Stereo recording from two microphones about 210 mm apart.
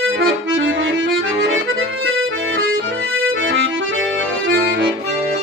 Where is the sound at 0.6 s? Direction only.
65° right (ahead or behind).